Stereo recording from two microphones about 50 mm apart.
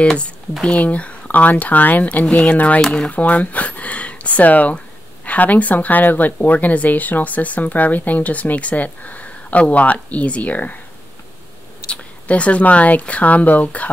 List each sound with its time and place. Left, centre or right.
0.7 s speech: left
2.2 s speech: left
11.9 s speech: left